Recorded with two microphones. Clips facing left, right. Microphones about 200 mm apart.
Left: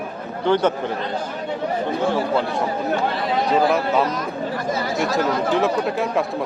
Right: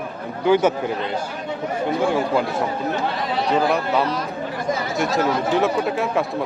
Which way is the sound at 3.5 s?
Centre (ahead or behind).